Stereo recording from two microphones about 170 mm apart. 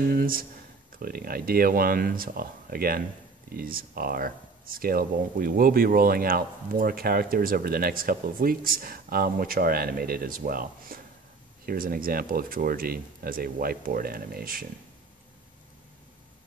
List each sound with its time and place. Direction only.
0.1 s speech: 60° right (ahead or behind)